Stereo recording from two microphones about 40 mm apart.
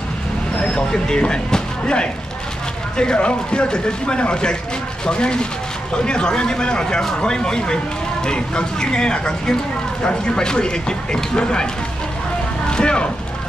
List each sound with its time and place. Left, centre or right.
0.6 s speech: centre
12.6 s speech: left